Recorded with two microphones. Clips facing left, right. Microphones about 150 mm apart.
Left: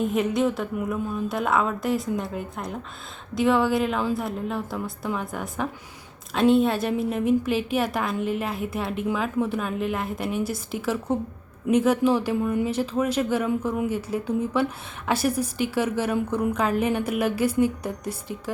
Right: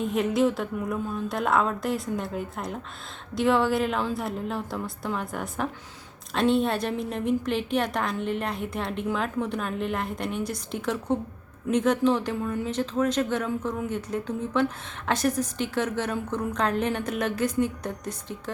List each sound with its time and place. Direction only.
0.0 s a woman's voice: centre (ahead or behind)